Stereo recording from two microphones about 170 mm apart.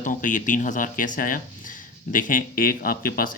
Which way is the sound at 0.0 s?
50° left (ahead or behind).